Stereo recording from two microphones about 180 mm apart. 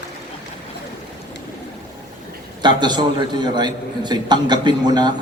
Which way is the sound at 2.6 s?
25° right (ahead or behind).